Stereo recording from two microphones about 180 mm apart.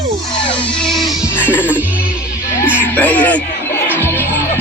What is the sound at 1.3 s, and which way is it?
Music, 10° left (ahead or behind).